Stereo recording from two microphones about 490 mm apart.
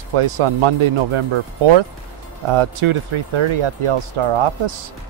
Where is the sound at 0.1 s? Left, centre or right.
Right.